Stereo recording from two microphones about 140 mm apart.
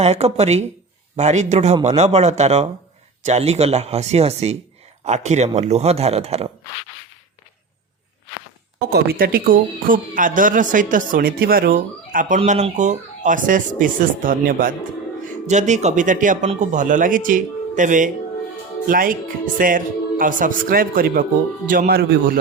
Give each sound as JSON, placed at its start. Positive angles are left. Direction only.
{"t": 0.0, "sound": "speech", "side_deg": -50}
{"t": 9.1, "sound": "speech", "side_deg": -90}
{"t": 12.5, "sound": "speech", "side_deg": -55}
{"t": 15.4, "sound": "speech", "side_deg": -55}
{"t": 18.9, "sound": "a man's voice", "side_deg": -85}